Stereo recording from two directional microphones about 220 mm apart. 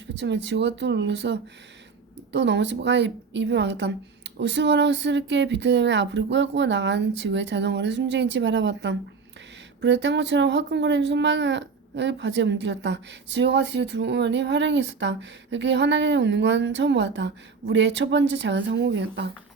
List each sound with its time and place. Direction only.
0.1 s speech: 50° right (ahead or behind)